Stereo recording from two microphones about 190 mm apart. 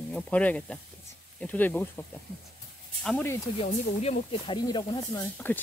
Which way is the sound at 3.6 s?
35° left (ahead or behind).